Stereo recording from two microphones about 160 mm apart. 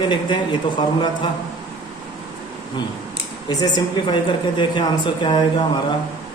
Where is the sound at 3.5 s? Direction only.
25° left (ahead or behind).